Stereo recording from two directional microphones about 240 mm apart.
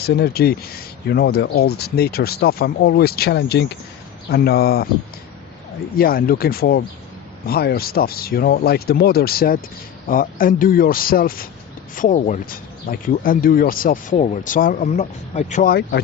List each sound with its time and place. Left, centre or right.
0.0 s speech: left
6.0 s speech: left